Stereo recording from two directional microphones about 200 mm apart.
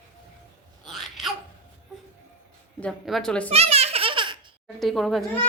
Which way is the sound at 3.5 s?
30° right (ahead or behind).